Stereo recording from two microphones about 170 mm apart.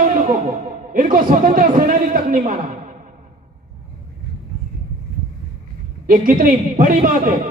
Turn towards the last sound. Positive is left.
turn(degrees=-50)  # may be behind; listen again after turning